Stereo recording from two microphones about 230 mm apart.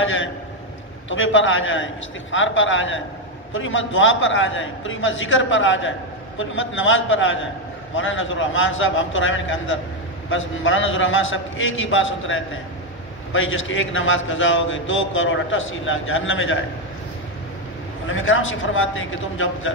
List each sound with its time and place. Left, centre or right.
0.0 s a sound: left
1.0 s a man's voice: left
18.0 s a man's voice: left